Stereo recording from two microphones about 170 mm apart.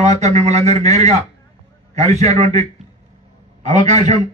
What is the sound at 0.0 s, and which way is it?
Speech, 40° right (ahead or behind).